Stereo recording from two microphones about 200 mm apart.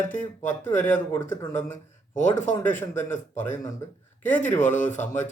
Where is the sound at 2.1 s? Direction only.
40° left (ahead or behind).